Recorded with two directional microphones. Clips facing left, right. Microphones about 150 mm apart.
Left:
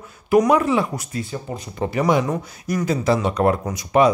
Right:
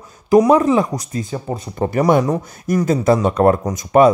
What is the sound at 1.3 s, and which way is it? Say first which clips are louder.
Speech: right 5 dB; 50° right (ahead or behind).